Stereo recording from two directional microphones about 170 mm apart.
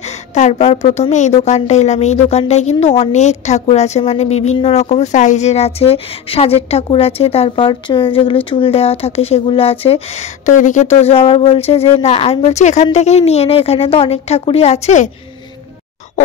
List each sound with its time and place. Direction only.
0.3 s speech: 40° left (ahead or behind)